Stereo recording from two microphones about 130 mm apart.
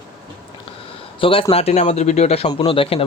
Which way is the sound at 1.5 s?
55° left (ahead or behind).